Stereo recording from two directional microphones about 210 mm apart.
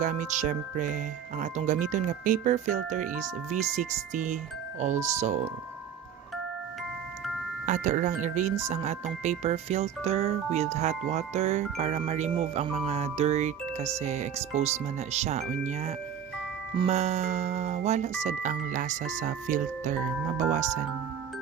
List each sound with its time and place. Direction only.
0.0 s speech: 35° right (ahead or behind)
7.7 s speech: 35° right (ahead or behind)